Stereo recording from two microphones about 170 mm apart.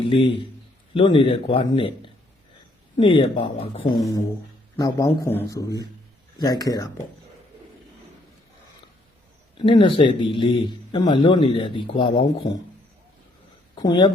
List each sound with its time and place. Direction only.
0.9 s a man's voice: 30° left (ahead or behind)
9.6 s speech: 30° left (ahead or behind)
13.8 s speech: 25° left (ahead or behind)